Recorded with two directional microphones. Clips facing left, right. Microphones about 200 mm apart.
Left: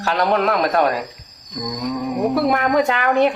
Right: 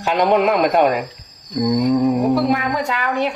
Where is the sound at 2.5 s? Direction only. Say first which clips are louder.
Left 2 dB; 55° left (ahead or behind).